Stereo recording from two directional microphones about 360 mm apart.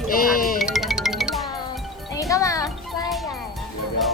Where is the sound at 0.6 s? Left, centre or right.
Centre.